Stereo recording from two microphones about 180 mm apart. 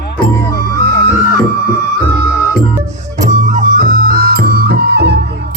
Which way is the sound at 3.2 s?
40° right (ahead or behind).